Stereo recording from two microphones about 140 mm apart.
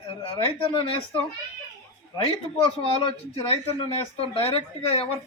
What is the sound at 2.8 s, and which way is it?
Speech, 40° left (ahead or behind).